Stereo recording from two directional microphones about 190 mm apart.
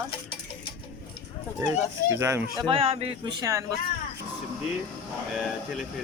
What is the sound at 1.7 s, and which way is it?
Speech, 15° right (ahead or behind).